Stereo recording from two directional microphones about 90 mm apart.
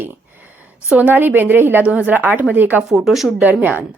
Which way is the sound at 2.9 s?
Centre (ahead or behind).